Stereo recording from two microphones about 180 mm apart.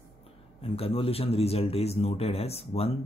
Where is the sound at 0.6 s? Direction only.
30° left (ahead or behind).